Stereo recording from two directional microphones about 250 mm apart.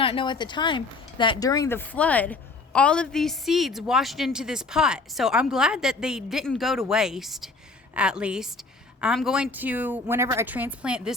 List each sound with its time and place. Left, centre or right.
0.0 s a woman's voice: left; by 11.1 s centre